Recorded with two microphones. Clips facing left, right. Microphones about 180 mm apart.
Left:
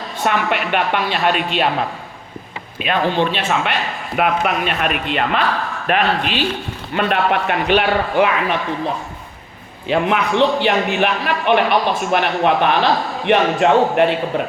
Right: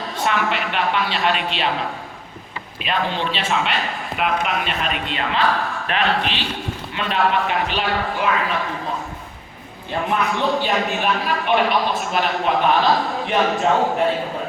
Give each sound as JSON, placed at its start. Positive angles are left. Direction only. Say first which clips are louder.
{"t": 0.3, "sound": "speech", "louder": "left 4 dB", "side_deg": 55}
{"t": 2.8, "sound": "a man's voice", "louder": "left 6 dB", "side_deg": 55}
{"t": 5.9, "sound": "speech", "louder": "left 4 dB", "side_deg": 45}
{"t": 6.9, "sound": "a man's voice", "louder": "left 3 dB", "side_deg": 60}
{"t": 9.9, "sound": "a man's voice", "louder": "left 5 dB", "side_deg": 80}